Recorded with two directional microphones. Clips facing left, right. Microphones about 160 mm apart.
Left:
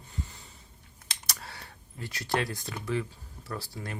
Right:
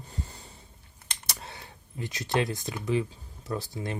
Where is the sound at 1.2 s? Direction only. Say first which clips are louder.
Right 2 dB; 20° right (ahead or behind).